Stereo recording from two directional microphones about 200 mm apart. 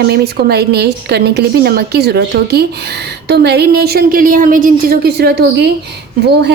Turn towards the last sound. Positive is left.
turn(degrees=-55)  # may be behind; listen again after turning